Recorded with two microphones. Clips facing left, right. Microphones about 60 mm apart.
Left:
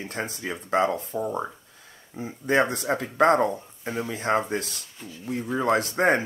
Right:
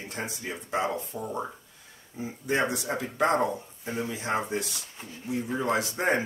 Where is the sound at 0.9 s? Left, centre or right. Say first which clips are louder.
Left 4 dB; left.